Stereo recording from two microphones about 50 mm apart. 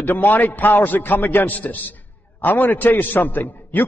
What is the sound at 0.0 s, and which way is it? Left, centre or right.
A man's voice, left.